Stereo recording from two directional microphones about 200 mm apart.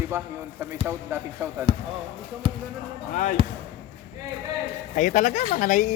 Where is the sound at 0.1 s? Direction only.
10° right (ahead or behind).